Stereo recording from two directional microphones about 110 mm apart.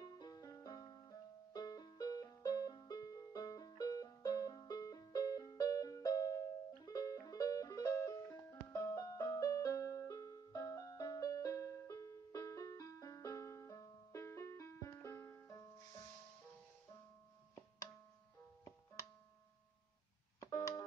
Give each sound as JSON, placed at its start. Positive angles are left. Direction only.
{"t": 0.0, "sound": "music", "side_deg": 40}
{"t": 20.3, "sound": "busy signal", "side_deg": 35}